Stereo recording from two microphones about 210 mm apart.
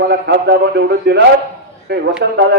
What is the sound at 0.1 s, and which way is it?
A man's voice, 55° right (ahead or behind).